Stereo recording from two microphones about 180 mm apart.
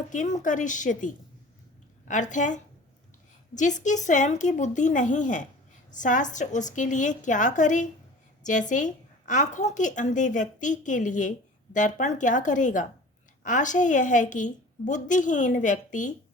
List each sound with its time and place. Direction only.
0.1 s a woman's voice: 45° left (ahead or behind)